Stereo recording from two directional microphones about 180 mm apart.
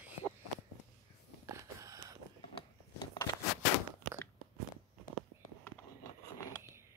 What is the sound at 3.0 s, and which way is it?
Crackle, 15° left (ahead or behind).